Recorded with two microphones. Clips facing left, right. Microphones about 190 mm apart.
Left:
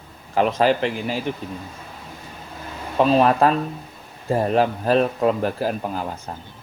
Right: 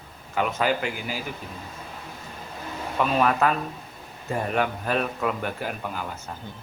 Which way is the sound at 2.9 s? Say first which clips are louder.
Left 6 dB; 30° left (ahead or behind).